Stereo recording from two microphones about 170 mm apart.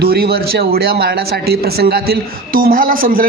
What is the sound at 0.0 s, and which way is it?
Speech, 65° right (ahead or behind).